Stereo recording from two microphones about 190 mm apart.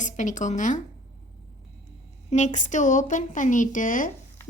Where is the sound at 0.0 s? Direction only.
40° left (ahead or behind).